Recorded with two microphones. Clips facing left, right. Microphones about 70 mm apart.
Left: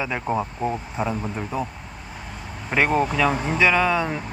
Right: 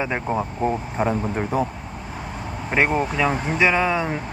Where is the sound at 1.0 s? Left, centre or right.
Right.